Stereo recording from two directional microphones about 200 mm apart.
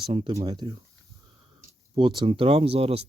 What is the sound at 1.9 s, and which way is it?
Speech, 25° right (ahead or behind).